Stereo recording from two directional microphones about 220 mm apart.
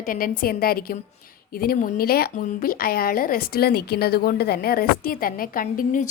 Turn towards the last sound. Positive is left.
turn(degrees=40)  # may be behind; listen again after turning